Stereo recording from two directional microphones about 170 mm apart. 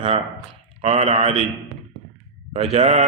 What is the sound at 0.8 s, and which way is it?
Speech, 35° right (ahead or behind).